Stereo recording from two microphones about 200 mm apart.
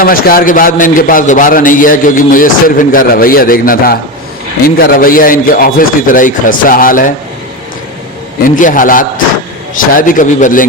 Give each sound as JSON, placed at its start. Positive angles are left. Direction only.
{"t": 0.0, "sound": "a man's voice", "side_deg": 45}
{"t": 8.4, "sound": "a man's voice", "side_deg": 40}